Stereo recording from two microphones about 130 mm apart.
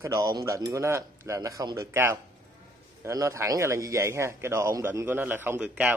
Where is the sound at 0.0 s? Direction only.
25° right (ahead or behind).